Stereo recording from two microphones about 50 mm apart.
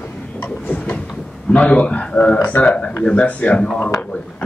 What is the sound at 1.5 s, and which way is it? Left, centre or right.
Speech, left.